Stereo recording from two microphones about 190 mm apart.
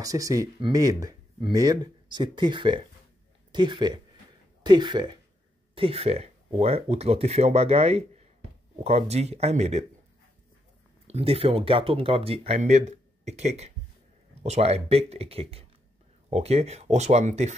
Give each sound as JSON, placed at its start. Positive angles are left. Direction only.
{"t": 0.0, "sound": "speech", "side_deg": -20}
{"t": 11.1, "sound": "speech", "side_deg": -30}